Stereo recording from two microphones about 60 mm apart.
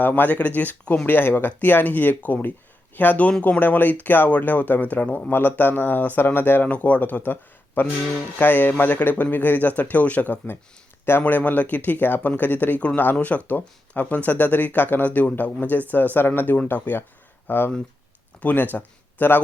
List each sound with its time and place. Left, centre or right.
0.0 s speech: left